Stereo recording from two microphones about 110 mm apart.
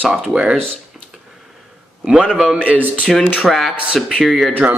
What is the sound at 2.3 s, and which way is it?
Speech, 5° right (ahead or behind).